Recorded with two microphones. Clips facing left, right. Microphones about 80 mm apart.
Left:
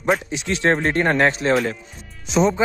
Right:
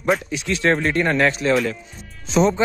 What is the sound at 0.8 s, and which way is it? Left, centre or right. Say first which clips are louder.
Speech: left 1 dB; left.